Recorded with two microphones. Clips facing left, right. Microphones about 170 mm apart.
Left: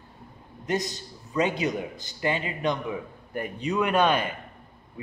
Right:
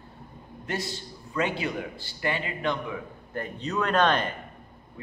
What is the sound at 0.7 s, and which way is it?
A man's voice, 20° left (ahead or behind).